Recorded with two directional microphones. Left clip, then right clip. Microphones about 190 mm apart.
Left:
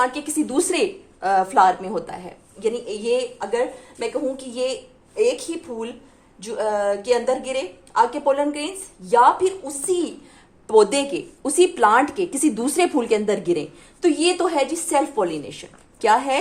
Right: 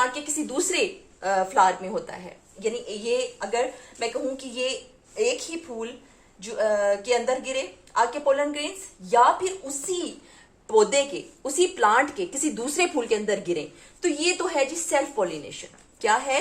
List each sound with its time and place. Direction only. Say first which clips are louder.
0.1 s a woman's voice: left 6 dB; 40° left (ahead or behind)